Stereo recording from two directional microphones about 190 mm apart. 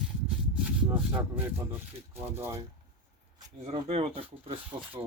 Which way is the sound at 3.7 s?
30° right (ahead or behind).